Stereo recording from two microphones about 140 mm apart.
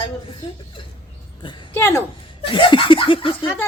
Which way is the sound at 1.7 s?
20° left (ahead or behind).